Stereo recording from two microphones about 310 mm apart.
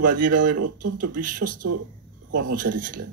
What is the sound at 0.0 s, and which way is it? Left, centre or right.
Speech, right.